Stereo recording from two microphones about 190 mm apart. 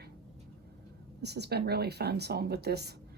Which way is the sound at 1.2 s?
60° right (ahead or behind).